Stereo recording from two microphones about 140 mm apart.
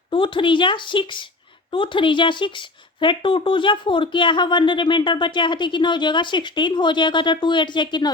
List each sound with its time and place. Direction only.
0.1 s speech: 35° left (ahead or behind)